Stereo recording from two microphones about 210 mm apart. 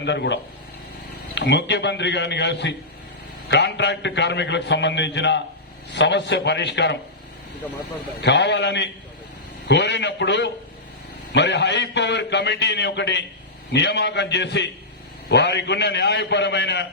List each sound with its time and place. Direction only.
0.0 s a man's voice: 55° left (ahead or behind)
1.4 s a man's voice: 55° left (ahead or behind)
8.2 s a man's voice: 55° left (ahead or behind)